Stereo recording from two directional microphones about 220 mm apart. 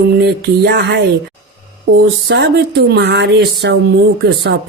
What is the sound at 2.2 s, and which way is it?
Speech, 50° right (ahead or behind).